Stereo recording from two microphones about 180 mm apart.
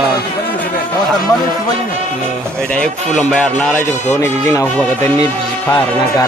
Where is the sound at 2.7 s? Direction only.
5° left (ahead or behind).